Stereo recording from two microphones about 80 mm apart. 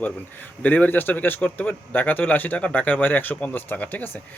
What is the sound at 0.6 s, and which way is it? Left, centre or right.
Speech, centre.